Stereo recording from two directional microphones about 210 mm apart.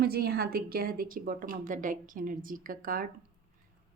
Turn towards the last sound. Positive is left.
turn(degrees=-40)  # may be behind; listen again after turning